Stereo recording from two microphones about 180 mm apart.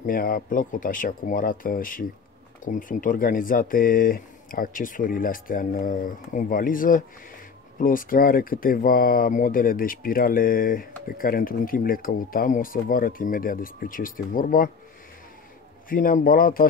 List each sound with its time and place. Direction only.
0.0 s speech: 50° left (ahead or behind)
15.9 s speech: 50° left (ahead or behind)